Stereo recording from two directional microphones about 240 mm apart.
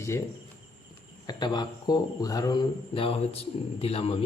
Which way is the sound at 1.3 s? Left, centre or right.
Centre.